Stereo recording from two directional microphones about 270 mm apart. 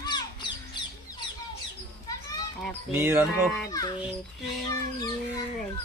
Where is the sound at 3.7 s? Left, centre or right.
Centre.